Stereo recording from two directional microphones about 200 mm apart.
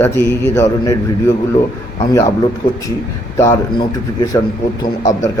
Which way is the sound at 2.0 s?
20° left (ahead or behind).